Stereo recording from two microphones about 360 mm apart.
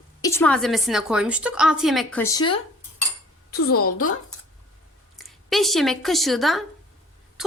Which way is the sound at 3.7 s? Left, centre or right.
Left.